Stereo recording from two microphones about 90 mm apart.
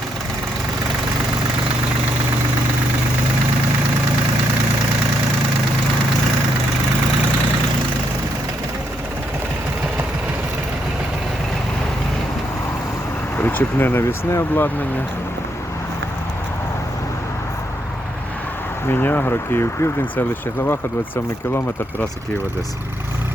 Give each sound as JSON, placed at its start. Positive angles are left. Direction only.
{"t": 13.4, "sound": "speech", "side_deg": 20}
{"t": 18.9, "sound": "speech", "side_deg": 25}